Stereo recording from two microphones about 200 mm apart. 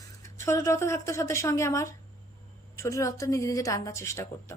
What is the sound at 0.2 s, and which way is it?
A woman's voice, 15° left (ahead or behind).